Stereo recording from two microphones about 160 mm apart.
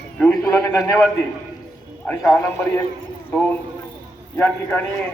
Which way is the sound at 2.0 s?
15° left (ahead or behind).